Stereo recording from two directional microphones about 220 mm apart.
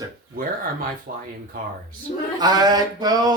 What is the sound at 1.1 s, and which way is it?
Speech, 40° right (ahead or behind).